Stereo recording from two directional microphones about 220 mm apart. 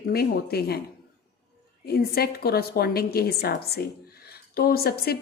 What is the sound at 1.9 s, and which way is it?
A woman's voice, 45° left (ahead or behind).